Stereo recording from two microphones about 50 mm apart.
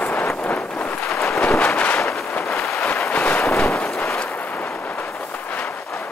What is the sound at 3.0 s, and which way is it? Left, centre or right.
Wind noise, left.